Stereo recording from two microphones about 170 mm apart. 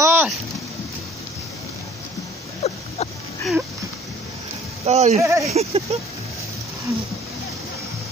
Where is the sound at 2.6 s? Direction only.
35° left (ahead or behind).